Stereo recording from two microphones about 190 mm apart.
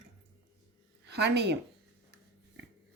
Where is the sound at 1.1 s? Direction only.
65° right (ahead or behind).